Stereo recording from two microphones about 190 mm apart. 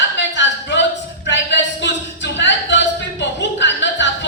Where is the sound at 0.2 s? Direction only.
70° left (ahead or behind).